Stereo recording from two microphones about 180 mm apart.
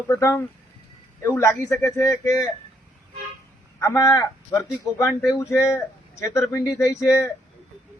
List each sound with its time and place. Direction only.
0.1 s speech: 15° left (ahead or behind)
3.8 s speech: 15° left (ahead or behind)